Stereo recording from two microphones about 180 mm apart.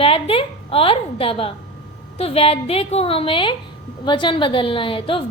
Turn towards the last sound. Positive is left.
turn(degrees=30)  # may be behind; listen again after turning